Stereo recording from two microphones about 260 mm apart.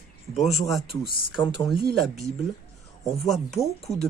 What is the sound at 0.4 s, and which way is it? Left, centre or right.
Speech, centre.